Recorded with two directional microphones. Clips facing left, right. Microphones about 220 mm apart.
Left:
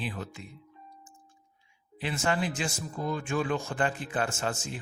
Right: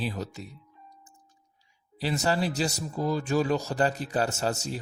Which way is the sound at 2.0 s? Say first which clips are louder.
Right 3 dB; 40° right (ahead or behind).